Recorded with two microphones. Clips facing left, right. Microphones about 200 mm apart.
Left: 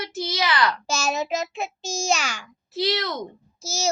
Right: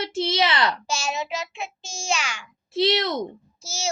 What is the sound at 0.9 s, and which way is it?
A child's voice, 40° left (ahead or behind).